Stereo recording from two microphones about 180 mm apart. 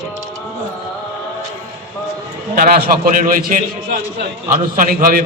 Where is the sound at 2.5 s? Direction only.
55° right (ahead or behind).